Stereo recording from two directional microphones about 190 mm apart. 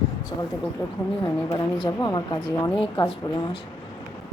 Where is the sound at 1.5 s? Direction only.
20° left (ahead or behind).